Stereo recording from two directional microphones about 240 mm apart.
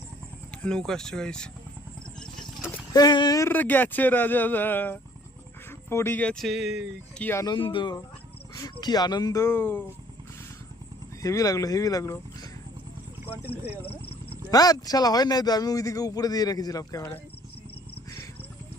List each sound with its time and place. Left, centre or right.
0.6 s speech: centre
2.9 s speech: centre
7.3 s speech: centre
11.2 s speech: centre
14.5 s speech: centre